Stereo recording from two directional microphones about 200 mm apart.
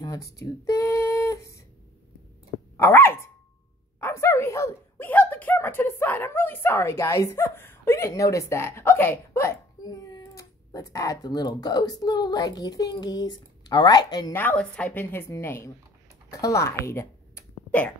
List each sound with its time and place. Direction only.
0.0 s a sound: 15° left (ahead or behind)
2.8 s a woman's voice: 10° left (ahead or behind)
14.4 s a woman's voice: 5° left (ahead or behind)